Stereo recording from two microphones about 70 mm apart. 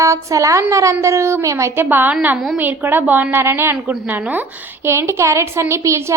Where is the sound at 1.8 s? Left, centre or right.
Right.